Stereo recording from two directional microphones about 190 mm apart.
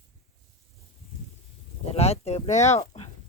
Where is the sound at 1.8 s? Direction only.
35° left (ahead or behind).